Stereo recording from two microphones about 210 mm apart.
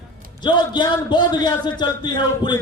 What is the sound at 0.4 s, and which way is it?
A man's voice, 20° left (ahead or behind).